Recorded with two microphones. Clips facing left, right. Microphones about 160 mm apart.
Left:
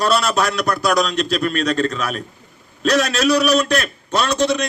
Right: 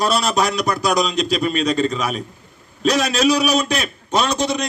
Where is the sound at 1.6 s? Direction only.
10° right (ahead or behind).